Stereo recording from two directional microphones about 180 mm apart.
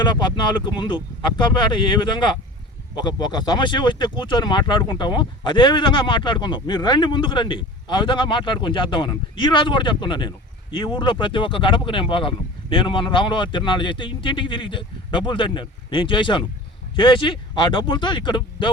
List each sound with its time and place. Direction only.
0.0 s speech: 25° left (ahead or behind)